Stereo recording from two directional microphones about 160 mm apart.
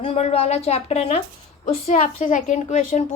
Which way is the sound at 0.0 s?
40° left (ahead or behind).